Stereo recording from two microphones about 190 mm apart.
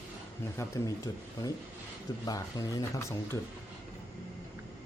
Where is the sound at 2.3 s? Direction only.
20° left (ahead or behind).